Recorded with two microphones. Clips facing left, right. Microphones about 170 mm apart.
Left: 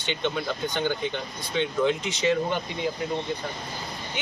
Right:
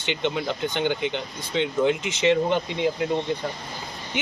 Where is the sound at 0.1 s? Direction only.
15° right (ahead or behind).